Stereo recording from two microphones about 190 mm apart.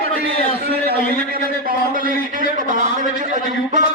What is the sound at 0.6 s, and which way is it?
A man's voice, 55° right (ahead or behind).